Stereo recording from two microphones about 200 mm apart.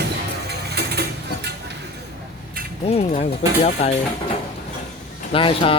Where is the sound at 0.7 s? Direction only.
55° right (ahead or behind).